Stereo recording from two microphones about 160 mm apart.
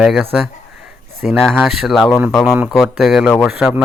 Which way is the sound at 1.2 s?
Centre (ahead or behind).